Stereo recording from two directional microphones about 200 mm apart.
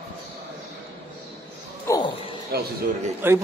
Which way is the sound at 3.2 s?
10° right (ahead or behind).